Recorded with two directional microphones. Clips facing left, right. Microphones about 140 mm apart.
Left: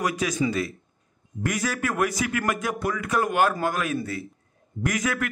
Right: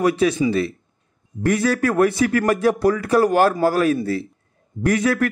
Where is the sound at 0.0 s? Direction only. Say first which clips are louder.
Right 7 dB; 30° right (ahead or behind).